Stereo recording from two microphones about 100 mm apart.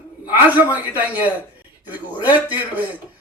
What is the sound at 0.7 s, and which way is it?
A man's voice, 15° right (ahead or behind).